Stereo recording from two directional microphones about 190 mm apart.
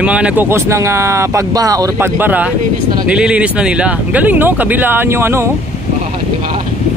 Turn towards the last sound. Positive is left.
turn(degrees=-15)  # may be behind; listen again after turning